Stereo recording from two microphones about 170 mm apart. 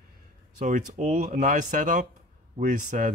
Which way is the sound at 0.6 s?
50° right (ahead or behind).